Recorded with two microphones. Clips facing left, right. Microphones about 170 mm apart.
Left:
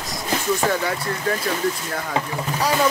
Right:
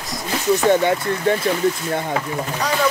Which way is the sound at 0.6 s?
25° right (ahead or behind).